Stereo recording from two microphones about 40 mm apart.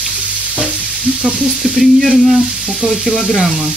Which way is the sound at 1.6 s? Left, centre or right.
Centre.